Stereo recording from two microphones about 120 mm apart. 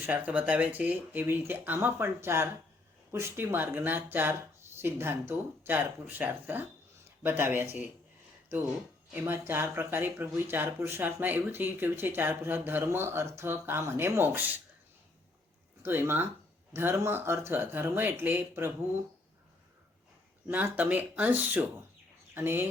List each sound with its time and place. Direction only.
0.0 s speech: 15° right (ahead or behind)
9.1 s speech: 20° right (ahead or behind)
15.8 s speech: 20° right (ahead or behind)
20.5 s speech: 15° right (ahead or behind)